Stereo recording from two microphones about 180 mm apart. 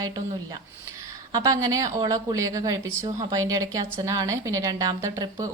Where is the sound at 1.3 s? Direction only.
20° right (ahead or behind).